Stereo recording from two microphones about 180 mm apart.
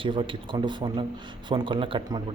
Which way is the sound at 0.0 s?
30° right (ahead or behind).